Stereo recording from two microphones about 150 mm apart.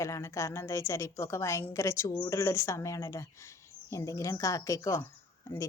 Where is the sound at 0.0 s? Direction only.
20° left (ahead or behind).